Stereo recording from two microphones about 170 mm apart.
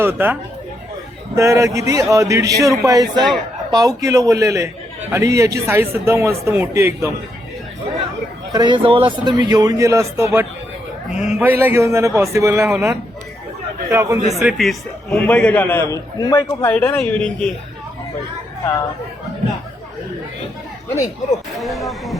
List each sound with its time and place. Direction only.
0.0 s a man's voice: 10° right (ahead or behind)
1.4 s a man's voice: 15° right (ahead or behind)
8.5 s a man's voice: 25° right (ahead or behind)
11.1 s a man's voice: 45° left (ahead or behind)
11.3 s a man's voice: 10° right (ahead or behind)
14.3 s a man's voice: centre (ahead or behind)
21.6 s speech: centre (ahead or behind)